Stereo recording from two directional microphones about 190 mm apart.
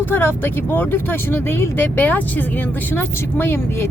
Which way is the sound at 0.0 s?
10° left (ahead or behind).